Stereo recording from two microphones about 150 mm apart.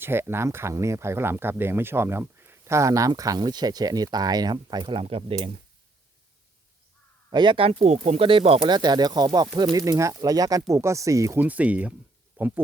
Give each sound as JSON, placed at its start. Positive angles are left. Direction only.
{"t": 0.0, "sound": "speech", "side_deg": -15}
{"t": 7.3, "sound": "speech", "side_deg": -30}